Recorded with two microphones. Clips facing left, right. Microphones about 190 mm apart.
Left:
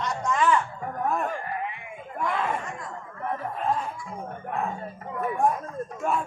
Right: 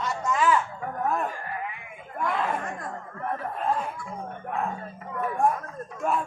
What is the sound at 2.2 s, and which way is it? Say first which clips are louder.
Speech: even; centre (ahead or behind).